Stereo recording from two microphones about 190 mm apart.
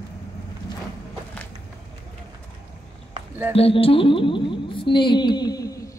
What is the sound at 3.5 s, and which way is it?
Music, 30° left (ahead or behind).